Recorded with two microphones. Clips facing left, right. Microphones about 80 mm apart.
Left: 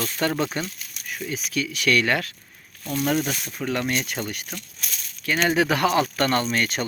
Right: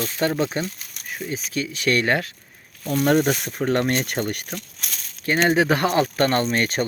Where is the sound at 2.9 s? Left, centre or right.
Right.